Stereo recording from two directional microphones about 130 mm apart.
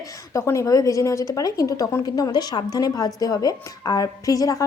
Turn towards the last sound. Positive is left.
turn(degrees=25)  # may be behind; listen again after turning